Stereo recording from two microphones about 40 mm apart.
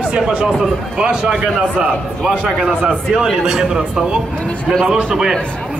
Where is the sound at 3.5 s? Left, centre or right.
Centre.